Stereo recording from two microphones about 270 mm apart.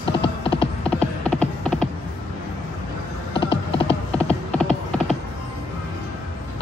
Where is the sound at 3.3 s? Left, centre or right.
Centre.